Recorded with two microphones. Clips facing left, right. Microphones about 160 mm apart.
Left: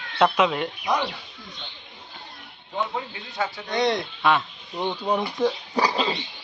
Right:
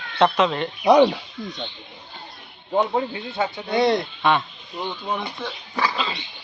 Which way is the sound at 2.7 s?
40° right (ahead or behind).